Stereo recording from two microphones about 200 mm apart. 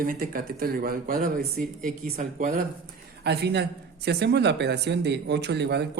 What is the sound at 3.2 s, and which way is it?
A woman's voice, 55° right (ahead or behind).